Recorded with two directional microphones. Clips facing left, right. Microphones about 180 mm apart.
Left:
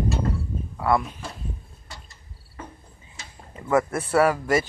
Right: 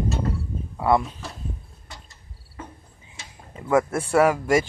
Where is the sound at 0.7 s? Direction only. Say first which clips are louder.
Right 2 dB; 20° right (ahead or behind).